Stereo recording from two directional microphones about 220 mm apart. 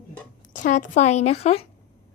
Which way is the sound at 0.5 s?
35° left (ahead or behind).